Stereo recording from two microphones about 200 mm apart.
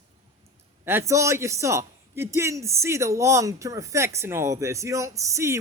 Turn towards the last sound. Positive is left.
turn(degrees=-15)  # may be behind; listen again after turning